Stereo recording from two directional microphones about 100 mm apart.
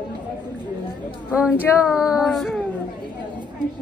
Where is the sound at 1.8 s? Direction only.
5° right (ahead or behind).